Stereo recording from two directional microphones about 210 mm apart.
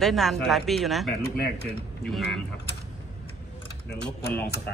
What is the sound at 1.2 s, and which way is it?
Speech, 50° left (ahead or behind).